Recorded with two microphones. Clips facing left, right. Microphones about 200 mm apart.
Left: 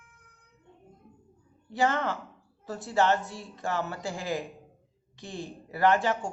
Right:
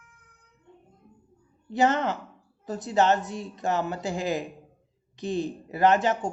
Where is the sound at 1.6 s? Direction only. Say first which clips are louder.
Right 4 dB; 20° right (ahead or behind).